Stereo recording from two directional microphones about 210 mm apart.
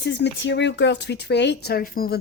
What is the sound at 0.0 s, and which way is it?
Speech, 55° left (ahead or behind).